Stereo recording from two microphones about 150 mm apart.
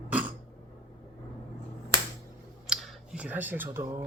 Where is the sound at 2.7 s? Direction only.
5° right (ahead or behind).